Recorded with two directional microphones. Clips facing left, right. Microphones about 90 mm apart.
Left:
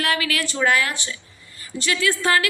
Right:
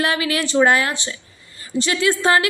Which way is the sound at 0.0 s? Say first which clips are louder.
Right 3 dB; 25° right (ahead or behind).